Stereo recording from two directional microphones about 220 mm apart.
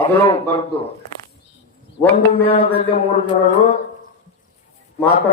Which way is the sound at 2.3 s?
25° left (ahead or behind).